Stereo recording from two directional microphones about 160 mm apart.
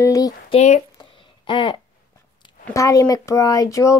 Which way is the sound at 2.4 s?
20° left (ahead or behind).